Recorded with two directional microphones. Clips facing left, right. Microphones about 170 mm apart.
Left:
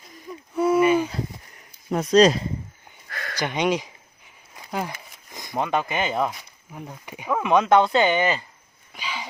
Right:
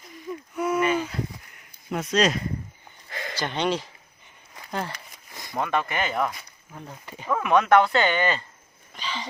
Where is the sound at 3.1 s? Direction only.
15° right (ahead or behind).